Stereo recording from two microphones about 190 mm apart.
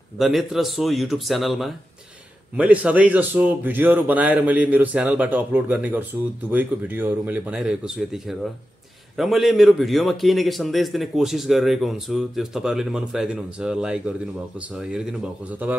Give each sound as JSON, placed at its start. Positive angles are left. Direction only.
{"t": 0.2, "sound": "a man's voice", "side_deg": 0}